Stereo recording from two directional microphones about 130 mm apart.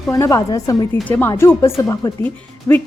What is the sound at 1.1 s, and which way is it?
A woman's voice, 15° left (ahead or behind).